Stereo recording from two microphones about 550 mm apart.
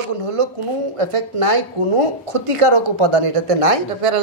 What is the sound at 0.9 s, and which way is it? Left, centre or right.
Speech, right.